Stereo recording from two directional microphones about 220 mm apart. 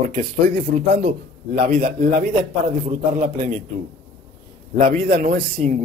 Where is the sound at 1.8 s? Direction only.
35° right (ahead or behind).